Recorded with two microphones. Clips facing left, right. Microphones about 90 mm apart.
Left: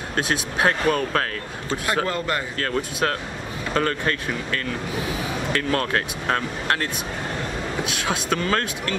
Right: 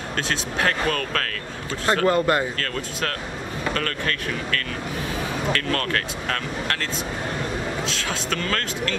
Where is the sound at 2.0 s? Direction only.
25° right (ahead or behind).